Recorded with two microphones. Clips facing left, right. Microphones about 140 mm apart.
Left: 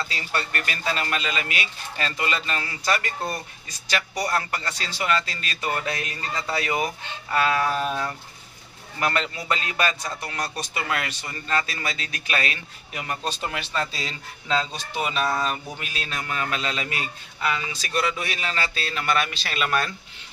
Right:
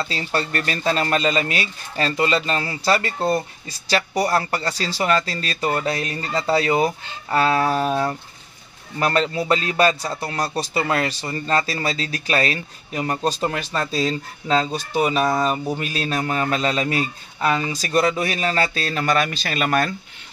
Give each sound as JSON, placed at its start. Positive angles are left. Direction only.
{"t": 0.1, "sound": "a man's voice", "side_deg": -35}